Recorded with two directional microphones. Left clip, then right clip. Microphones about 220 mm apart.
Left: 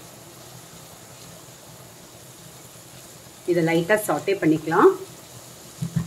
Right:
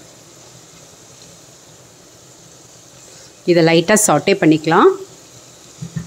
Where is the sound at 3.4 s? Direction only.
50° right (ahead or behind).